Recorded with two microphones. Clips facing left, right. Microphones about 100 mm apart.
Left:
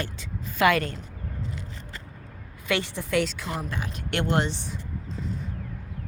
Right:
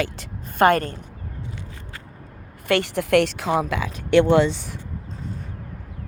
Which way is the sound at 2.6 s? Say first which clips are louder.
Right 7 dB; 70° right (ahead or behind).